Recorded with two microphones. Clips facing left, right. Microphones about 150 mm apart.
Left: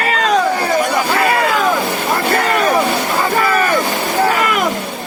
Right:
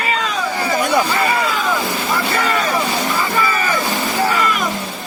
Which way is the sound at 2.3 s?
55° left (ahead or behind).